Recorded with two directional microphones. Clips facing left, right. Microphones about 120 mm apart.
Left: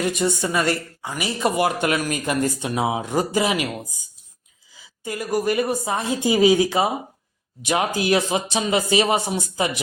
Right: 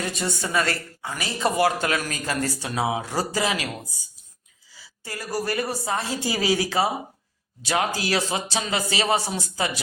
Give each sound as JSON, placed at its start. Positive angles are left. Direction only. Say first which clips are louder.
{"t": 0.0, "sound": "a woman's voice", "louder": "left 6 dB", "side_deg": 15}
{"t": 4.7, "sound": "a woman's voice", "louder": "left 7 dB", "side_deg": 20}